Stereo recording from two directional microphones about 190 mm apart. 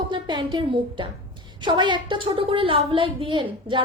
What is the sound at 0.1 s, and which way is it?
A woman's voice, 25° right (ahead or behind).